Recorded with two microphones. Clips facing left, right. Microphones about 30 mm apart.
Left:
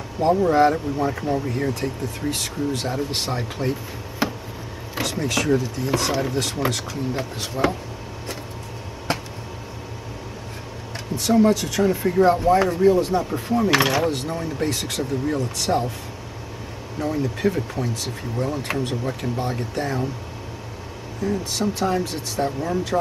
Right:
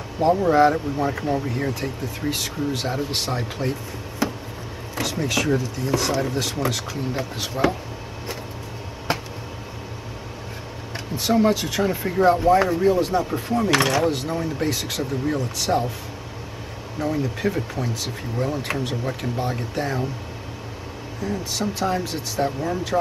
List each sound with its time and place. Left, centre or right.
0.2 s speech: centre
4.2 s a sound: left
5.0 s speech: centre
9.1 s a sound: centre
11.1 s speech: centre
17.0 s speech: centre
21.2 s speech: centre